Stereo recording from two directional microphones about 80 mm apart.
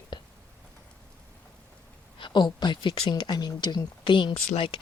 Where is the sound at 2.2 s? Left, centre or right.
Left.